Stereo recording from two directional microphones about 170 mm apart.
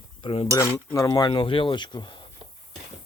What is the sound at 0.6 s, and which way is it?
Cutlery, 15° left (ahead or behind).